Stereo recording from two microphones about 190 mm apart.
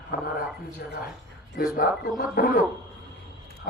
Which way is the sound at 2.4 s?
50° left (ahead or behind).